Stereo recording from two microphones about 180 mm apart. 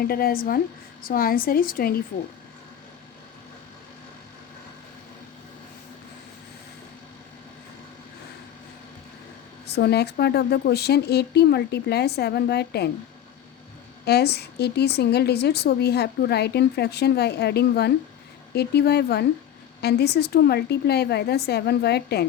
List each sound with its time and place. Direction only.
0.0 s a woman's voice: 55° left (ahead or behind)
9.6 s a woman's voice: 65° left (ahead or behind)
14.0 s a woman's voice: 65° left (ahead or behind)